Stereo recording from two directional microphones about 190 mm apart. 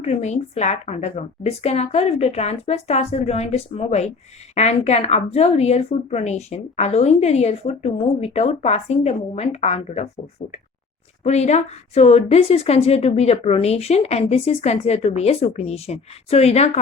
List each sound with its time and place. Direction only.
0.0 s a woman's voice: 35° left (ahead or behind)
11.2 s a woman's voice: 35° left (ahead or behind)